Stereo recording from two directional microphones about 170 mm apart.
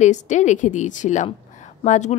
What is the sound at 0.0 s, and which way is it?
A woman's voice, 45° left (ahead or behind).